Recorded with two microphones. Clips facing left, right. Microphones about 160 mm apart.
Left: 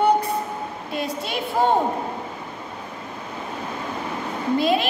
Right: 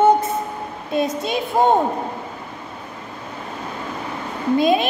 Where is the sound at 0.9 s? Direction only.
20° right (ahead or behind).